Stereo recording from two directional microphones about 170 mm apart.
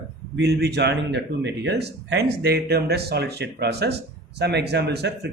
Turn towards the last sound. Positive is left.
turn(degrees=-75)  # may be behind; listen again after turning